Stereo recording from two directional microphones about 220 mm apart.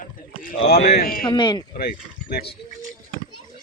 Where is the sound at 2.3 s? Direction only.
45° left (ahead or behind).